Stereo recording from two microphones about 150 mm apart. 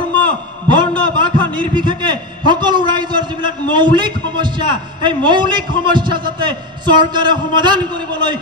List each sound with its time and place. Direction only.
0.7 s a man's voice: 30° right (ahead or behind)